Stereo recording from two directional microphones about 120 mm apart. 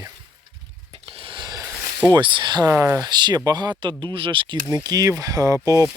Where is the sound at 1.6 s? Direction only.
10° left (ahead or behind).